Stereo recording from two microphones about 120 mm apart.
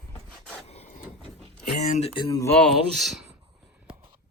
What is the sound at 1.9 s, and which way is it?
Speech, 60° left (ahead or behind).